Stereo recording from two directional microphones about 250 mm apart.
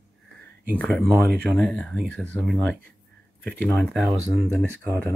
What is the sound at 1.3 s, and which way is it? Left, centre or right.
Speech, right.